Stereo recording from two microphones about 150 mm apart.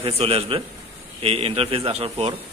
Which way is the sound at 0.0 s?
40° right (ahead or behind).